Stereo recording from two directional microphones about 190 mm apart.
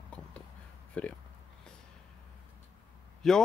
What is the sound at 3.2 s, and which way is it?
Speech, centre (ahead or behind).